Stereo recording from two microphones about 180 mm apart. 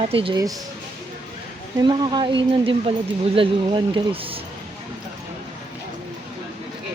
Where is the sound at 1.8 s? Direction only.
25° right (ahead or behind).